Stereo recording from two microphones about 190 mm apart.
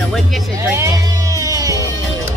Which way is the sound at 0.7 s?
15° right (ahead or behind).